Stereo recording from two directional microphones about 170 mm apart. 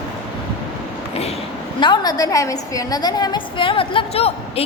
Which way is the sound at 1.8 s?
25° left (ahead or behind).